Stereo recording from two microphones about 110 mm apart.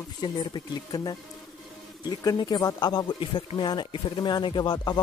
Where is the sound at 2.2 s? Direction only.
35° left (ahead or behind).